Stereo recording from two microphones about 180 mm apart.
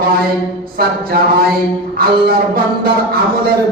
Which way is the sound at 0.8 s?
55° right (ahead or behind).